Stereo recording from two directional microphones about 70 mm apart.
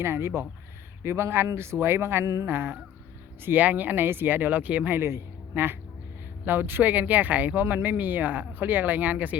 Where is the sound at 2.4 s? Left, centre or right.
Right.